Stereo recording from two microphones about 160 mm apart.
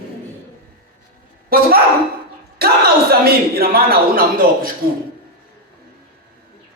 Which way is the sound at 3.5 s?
75° right (ahead or behind).